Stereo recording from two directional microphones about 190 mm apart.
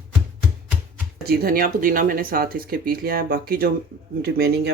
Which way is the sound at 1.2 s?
50° right (ahead or behind).